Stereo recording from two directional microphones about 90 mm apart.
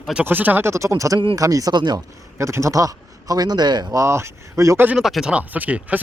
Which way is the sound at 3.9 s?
30° right (ahead or behind).